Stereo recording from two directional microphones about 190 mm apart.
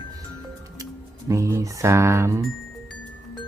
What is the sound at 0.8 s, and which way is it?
Speech, 15° right (ahead or behind).